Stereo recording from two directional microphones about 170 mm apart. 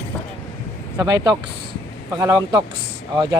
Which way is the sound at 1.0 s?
20° right (ahead or behind).